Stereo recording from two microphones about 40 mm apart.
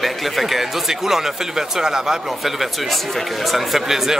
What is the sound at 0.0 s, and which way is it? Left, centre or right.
A man's voice, centre.